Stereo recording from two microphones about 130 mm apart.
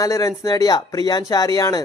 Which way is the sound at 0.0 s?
25° left (ahead or behind).